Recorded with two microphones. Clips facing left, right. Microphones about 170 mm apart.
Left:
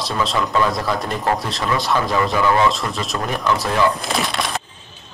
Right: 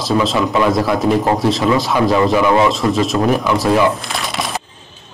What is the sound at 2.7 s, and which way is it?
Speech, centre (ahead or behind).